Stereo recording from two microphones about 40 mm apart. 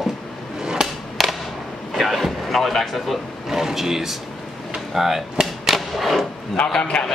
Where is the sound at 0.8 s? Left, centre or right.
Centre.